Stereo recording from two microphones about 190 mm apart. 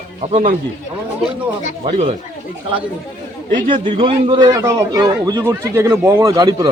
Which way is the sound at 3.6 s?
25° right (ahead or behind).